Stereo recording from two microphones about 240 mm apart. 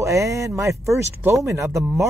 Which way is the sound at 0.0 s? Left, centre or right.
Centre.